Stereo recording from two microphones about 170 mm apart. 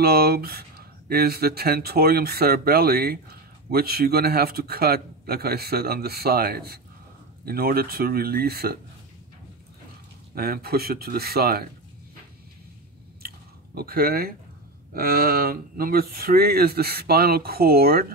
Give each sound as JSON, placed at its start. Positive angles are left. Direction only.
{"t": 0.0, "sound": "speech", "side_deg": -65}
{"t": 10.3, "sound": "speech", "side_deg": -65}
{"t": 13.7, "sound": "speech", "side_deg": -65}